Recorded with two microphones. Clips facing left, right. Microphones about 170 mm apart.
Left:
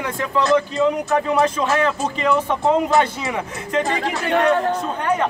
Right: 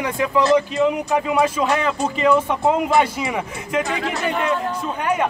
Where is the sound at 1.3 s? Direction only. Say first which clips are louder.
Even; centre (ahead or behind).